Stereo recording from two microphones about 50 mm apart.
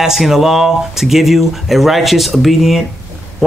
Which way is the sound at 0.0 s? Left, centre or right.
Centre.